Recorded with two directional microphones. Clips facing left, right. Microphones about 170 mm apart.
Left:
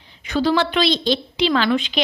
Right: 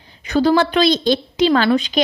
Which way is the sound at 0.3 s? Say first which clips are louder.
Right 4 dB; 45° right (ahead or behind).